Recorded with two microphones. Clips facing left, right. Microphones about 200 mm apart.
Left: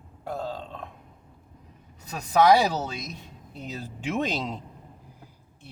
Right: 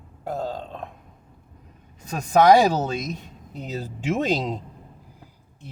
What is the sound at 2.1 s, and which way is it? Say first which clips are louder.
Speech: right 4 dB; 45° right (ahead or behind).